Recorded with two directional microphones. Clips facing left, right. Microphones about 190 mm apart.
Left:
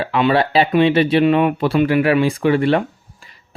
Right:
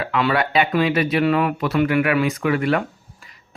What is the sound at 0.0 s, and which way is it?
Speech, 25° left (ahead or behind).